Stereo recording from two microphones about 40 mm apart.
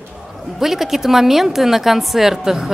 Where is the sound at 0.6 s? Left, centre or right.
Centre.